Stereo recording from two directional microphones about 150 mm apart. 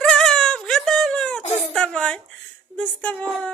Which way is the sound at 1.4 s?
45° left (ahead or behind).